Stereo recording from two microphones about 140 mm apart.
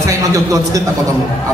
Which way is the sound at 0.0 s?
25° right (ahead or behind).